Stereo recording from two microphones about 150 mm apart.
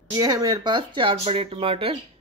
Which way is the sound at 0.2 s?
25° right (ahead or behind).